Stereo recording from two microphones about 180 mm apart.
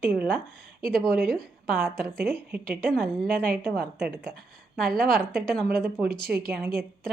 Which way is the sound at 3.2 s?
50° right (ahead or behind).